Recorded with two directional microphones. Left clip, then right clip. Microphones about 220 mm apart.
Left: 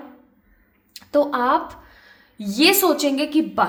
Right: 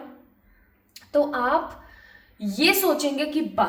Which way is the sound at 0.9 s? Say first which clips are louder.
Left 3 dB; 50° left (ahead or behind).